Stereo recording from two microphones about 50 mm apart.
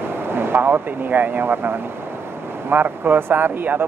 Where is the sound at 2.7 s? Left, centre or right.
Right.